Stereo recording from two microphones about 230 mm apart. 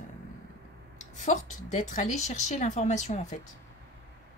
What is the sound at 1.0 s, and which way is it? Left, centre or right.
Speech, left.